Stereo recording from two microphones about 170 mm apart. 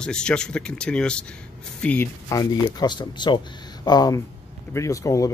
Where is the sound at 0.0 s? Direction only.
5° left (ahead or behind).